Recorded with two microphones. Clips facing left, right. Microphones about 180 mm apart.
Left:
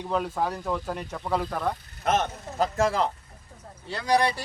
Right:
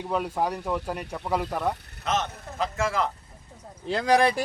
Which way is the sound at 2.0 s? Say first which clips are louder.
Left 3 dB; 55° left (ahead or behind).